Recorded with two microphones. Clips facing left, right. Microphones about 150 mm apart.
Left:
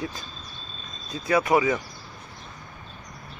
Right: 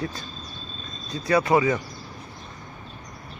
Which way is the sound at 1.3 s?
15° left (ahead or behind).